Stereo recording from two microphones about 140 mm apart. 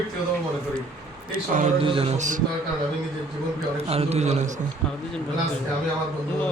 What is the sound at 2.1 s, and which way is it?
Speech, 60° right (ahead or behind).